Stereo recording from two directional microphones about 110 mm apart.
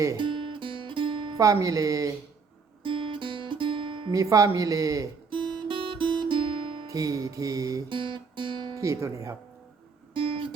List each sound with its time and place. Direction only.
0.2 s music: 50° right (ahead or behind)
1.4 s music: 30° right (ahead or behind)
2.8 s music: 50° right (ahead or behind)
4.1 s music: 30° right (ahead or behind)
5.3 s guitar: 50° right (ahead or behind)
6.8 s music: 30° right (ahead or behind)
7.9 s guitar: 50° right (ahead or behind)
8.7 s speech: 30° right (ahead or behind)
10.2 s music: 55° right (ahead or behind)